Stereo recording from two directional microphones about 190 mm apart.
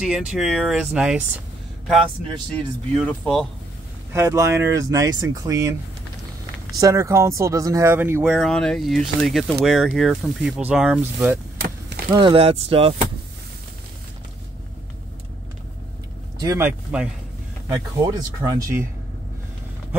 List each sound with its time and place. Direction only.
0.0 s speech: 5° right (ahead or behind)
3.0 s speech: 5° left (ahead or behind)
4.1 s speech: 15° right (ahead or behind)
6.8 s speech: 15° right (ahead or behind)
12.1 s speech: 25° right (ahead or behind)
16.3 s speech: 15° right (ahead or behind)
17.6 s speech: 20° right (ahead or behind)